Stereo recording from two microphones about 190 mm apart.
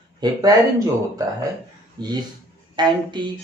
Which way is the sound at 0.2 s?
20° right (ahead or behind).